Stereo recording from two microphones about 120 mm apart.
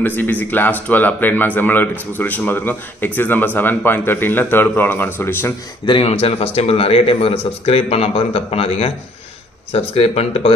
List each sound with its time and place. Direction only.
0.0 s speech: 15° left (ahead or behind)
5.9 s a man's voice: 50° left (ahead or behind)